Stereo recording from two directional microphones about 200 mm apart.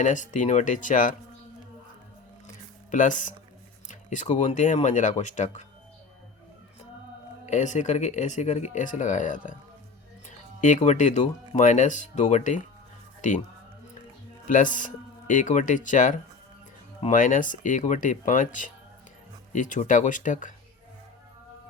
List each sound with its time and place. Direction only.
0.0 s speech: 40° left (ahead or behind)
2.9 s speech: 40° left (ahead or behind)
7.4 s speech: 35° left (ahead or behind)
14.4 s speech: 40° left (ahead or behind)